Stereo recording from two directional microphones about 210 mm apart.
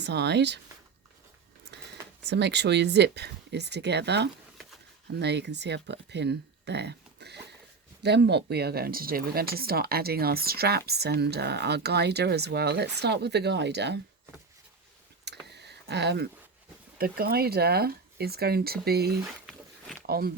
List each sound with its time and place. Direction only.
0.0 s speech: 55° right (ahead or behind)
2.2 s speech: 55° right (ahead or behind)
15.4 s a sound: 55° right (ahead or behind)
17.0 s speech: 45° right (ahead or behind)